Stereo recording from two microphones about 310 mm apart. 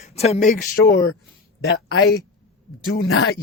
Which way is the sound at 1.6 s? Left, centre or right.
Left.